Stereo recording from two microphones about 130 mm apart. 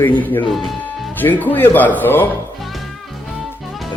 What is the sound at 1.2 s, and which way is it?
Speech, 15° left (ahead or behind).